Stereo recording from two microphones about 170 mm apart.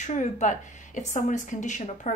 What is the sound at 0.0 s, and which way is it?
A woman's voice, 45° left (ahead or behind).